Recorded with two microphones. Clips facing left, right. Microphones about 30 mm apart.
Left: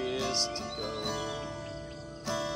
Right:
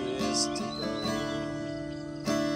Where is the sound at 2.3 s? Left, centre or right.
Right.